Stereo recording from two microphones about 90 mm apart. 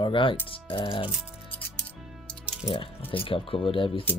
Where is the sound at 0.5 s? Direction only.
80° left.